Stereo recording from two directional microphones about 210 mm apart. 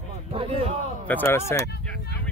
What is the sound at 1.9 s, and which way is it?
Speech, 50° left (ahead or behind).